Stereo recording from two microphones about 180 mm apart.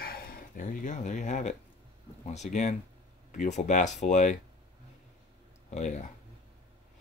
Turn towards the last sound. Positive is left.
turn(degrees=40)  # may be behind; listen again after turning